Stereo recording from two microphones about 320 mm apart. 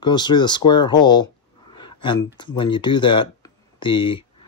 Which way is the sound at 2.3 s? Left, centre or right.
Centre.